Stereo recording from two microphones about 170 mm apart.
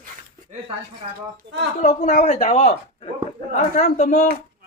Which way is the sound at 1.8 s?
45° left (ahead or behind).